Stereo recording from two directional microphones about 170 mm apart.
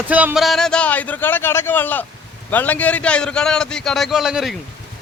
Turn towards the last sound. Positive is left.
turn(degrees=0)  # may be behind; listen again after turning